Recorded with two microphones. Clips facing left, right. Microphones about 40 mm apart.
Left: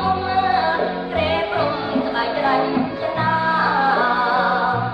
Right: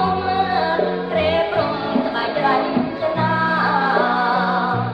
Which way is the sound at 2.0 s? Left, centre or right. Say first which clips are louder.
Even; centre.